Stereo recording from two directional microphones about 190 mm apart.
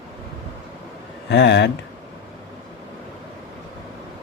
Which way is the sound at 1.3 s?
65° left (ahead or behind).